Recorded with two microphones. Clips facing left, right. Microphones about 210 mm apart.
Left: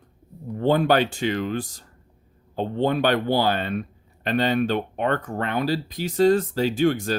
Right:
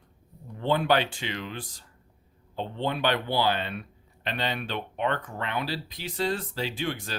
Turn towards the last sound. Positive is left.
turn(degrees=45)  # may be behind; listen again after turning